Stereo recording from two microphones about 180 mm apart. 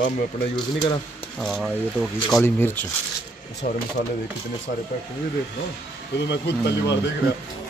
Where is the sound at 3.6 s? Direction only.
45° left (ahead or behind).